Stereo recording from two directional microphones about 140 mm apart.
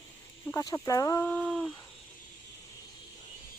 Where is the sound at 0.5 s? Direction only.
25° left (ahead or behind).